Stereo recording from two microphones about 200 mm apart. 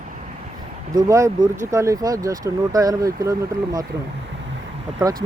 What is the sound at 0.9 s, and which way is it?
Speech, 15° right (ahead or behind).